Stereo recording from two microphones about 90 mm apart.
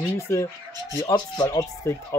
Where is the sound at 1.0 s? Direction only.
50° left (ahead or behind).